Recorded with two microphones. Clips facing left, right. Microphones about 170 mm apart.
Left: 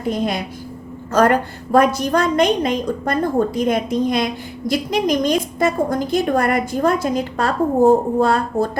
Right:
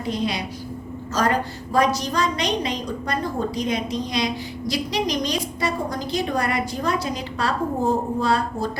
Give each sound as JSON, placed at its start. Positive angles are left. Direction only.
{"t": 0.0, "sound": "a woman's voice", "side_deg": 50}